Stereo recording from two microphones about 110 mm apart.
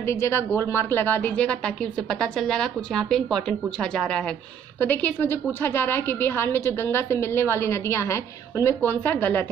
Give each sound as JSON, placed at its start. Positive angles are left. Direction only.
{"t": 0.0, "sound": "a woman's voice", "side_deg": 25}